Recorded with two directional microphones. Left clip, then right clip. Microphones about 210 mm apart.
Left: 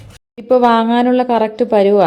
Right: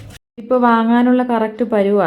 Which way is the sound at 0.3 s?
10° left (ahead or behind).